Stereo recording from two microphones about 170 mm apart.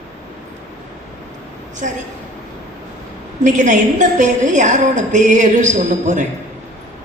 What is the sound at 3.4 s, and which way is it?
A woman's voice, 45° right (ahead or behind).